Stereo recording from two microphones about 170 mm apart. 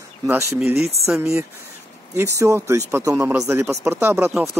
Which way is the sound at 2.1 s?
15° right (ahead or behind).